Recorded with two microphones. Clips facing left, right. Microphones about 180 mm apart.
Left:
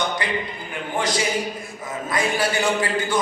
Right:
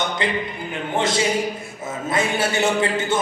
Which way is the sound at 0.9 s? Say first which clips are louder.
Right 3 dB; 25° right (ahead or behind).